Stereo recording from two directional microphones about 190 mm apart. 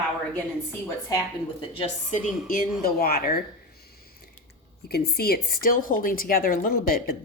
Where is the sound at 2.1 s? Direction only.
45° left (ahead or behind).